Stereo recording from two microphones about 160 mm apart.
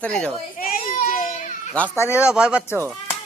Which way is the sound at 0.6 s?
65° left (ahead or behind).